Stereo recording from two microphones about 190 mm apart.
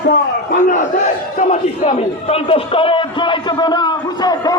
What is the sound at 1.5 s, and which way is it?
A man's voice, 40° left (ahead or behind).